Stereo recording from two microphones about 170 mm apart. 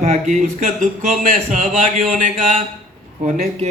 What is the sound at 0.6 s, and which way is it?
A man's voice, 55° right (ahead or behind).